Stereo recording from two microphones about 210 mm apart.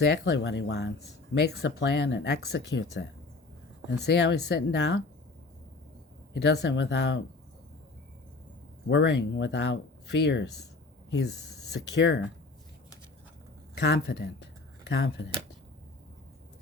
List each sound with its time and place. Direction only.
0.3 s speech: 55° left (ahead or behind)
6.3 s speech: 55° left (ahead or behind)
8.9 s speech: 55° left (ahead or behind)
11.7 s speech: 55° left (ahead or behind)
13.7 s speech: 50° left (ahead or behind)